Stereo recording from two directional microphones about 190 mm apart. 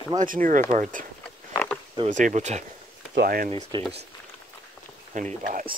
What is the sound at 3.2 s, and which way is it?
Speech, 50° right (ahead or behind).